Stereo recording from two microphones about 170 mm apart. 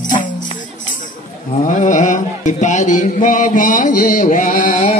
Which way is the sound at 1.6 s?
50° left (ahead or behind).